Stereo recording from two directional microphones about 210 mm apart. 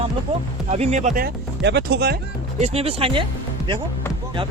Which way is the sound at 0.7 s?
30° right (ahead or behind).